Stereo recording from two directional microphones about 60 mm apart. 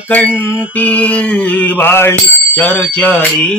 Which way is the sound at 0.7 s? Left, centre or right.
Left.